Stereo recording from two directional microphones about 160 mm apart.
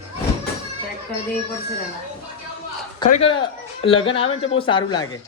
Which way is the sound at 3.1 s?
40° left (ahead or behind).